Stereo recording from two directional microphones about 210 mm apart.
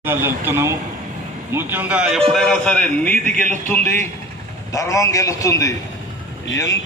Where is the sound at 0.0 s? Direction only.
10° right (ahead or behind); by 3.2 s 5° left (ahead or behind).